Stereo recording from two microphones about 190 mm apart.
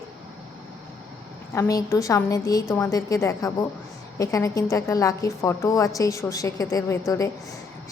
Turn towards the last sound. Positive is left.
turn(degrees=15)  # may be behind; listen again after turning